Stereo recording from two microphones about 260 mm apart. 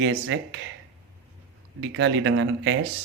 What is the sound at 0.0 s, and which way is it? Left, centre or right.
Speech, right.